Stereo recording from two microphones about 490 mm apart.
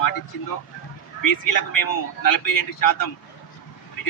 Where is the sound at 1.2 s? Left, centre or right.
Left.